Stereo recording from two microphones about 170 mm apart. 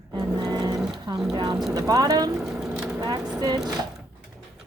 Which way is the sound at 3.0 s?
20° right (ahead or behind).